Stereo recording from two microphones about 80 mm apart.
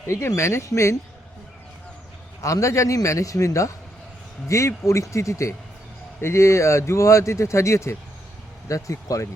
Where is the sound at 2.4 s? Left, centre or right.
Left.